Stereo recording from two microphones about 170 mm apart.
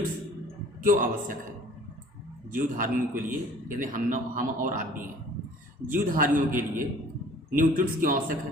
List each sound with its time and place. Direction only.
0.8 s a man's voice: 50° right (ahead or behind)
2.6 s a man's voice: 55° right (ahead or behind)